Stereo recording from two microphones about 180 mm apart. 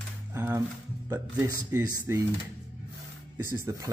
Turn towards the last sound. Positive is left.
turn(degrees=-15)  # may be behind; listen again after turning